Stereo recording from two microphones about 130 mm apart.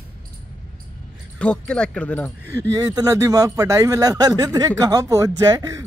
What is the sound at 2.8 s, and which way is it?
Speech, 25° right (ahead or behind).